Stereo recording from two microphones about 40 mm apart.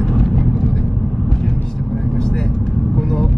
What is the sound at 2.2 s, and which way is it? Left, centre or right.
Vehicle, centre.